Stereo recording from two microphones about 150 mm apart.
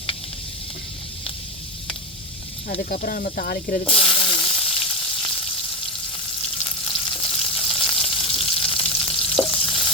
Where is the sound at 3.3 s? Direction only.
75° left (ahead or behind).